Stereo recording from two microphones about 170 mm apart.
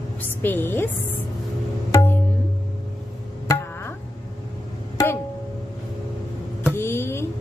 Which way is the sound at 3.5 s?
15° left (ahead or behind).